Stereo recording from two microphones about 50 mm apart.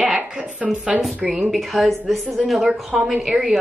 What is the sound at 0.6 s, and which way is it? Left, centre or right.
A woman's voice, centre.